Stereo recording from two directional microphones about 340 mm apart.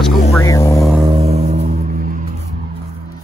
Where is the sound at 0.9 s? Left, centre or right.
Centre.